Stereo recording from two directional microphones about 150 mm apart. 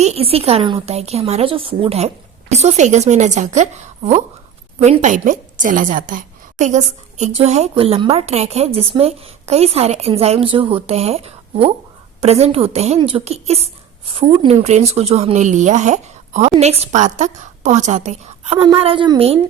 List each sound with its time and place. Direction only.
0.0 s a woman's voice: 45° right (ahead or behind)